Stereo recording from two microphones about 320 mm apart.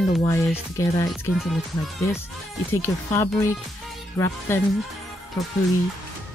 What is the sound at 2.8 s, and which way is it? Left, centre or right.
Speech, centre.